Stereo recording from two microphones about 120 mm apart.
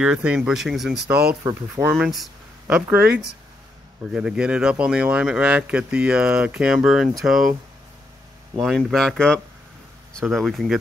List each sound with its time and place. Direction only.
0.0 s speech: 10° right (ahead or behind)
1.4 s speech: 25° right (ahead or behind)
2.9 s speech: 10° right (ahead or behind)
8.5 s speech: centre (ahead or behind)